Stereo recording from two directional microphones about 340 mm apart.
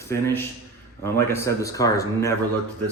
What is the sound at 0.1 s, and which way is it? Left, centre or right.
A man's voice, centre.